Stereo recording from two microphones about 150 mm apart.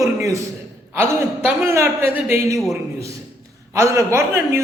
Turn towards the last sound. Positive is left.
turn(degrees=-20)  # may be behind; listen again after turning